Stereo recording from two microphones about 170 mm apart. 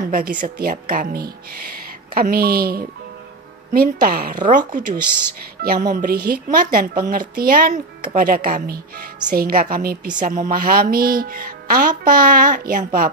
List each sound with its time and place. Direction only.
0.1 s speech: 55° right (ahead or behind)